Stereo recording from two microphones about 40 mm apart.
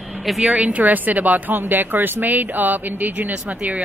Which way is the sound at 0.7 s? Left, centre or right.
Right.